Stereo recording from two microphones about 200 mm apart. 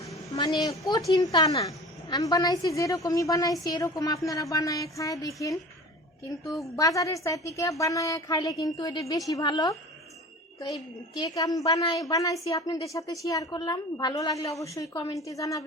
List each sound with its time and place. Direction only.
0.2 s a woman's voice: 20° left (ahead or behind)
6.7 s a woman's voice: 15° left (ahead or behind)
11.1 s a woman's voice: 20° left (ahead or behind)